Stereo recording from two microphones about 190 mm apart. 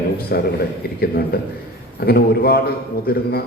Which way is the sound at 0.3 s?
55° left (ahead or behind).